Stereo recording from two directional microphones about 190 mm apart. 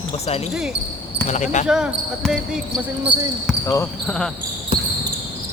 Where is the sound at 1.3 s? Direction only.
40° left (ahead or behind).